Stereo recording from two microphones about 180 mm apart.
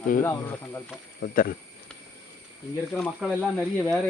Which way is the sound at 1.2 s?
55° left (ahead or behind).